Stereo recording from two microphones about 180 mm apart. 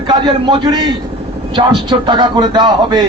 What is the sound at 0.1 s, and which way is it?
A man's voice, 25° right (ahead or behind).